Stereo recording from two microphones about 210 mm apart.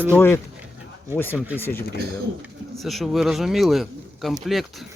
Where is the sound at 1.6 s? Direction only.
10° left (ahead or behind).